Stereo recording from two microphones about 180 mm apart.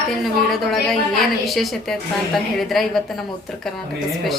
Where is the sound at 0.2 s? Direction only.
Centre (ahead or behind).